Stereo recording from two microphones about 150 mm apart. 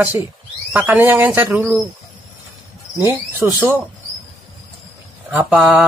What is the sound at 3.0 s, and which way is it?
Speech, 15° right (ahead or behind).